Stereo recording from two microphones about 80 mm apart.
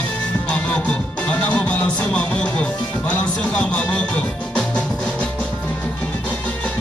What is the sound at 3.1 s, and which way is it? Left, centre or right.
Music, centre.